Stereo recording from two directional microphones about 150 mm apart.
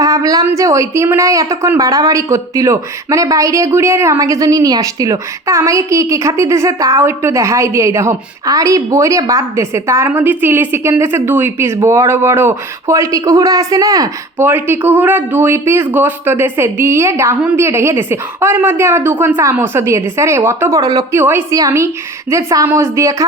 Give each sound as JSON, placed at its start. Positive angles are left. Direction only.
{"t": 0.0, "sound": "a woman's voice", "side_deg": -20}